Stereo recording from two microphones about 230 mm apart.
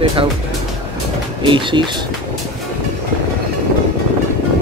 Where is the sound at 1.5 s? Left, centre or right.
Right.